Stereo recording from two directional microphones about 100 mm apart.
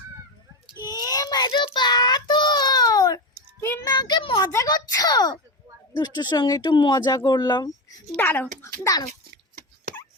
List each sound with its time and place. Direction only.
0.7 s child singing: 40° left (ahead or behind)
1.5 s child singing: 55° left (ahead or behind); by 3.2 s 35° left (ahead or behind)
3.6 s child singing: 25° left (ahead or behind)
3.8 s a sound: 45° left (ahead or behind)
4.5 s a child's voice: 35° left (ahead or behind)
8.1 s a child's voice: 15° left (ahead or behind)
8.6 s a child's voice: 35° left (ahead or behind)